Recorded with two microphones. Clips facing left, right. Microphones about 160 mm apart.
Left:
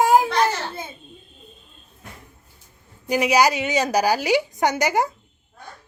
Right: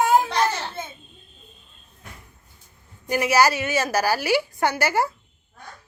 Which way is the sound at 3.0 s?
15° left (ahead or behind).